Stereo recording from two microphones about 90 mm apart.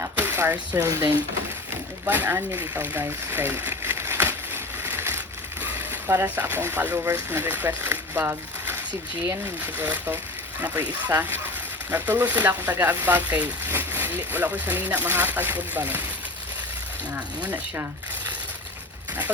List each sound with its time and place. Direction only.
0.0 s a sound: 25° right (ahead or behind)
2.0 s speech: 25° right (ahead or behind)
17.2 s speech: 20° right (ahead or behind)